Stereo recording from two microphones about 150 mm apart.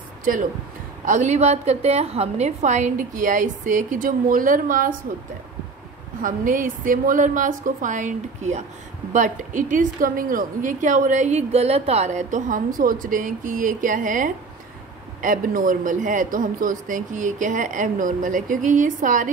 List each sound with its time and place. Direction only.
0.2 s speech: 65° right (ahead or behind)
1.0 s a woman's voice: 55° right (ahead or behind)
6.2 s a woman's voice: 65° right (ahead or behind)